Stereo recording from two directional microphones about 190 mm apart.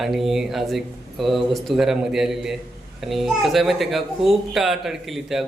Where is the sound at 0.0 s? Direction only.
Centre (ahead or behind).